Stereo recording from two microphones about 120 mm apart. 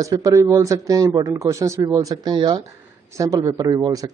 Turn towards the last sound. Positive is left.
turn(degrees=-30)  # may be behind; listen again after turning